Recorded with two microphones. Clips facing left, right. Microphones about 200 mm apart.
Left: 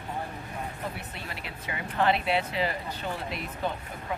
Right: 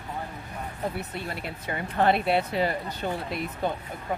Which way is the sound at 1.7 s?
45° right (ahead or behind).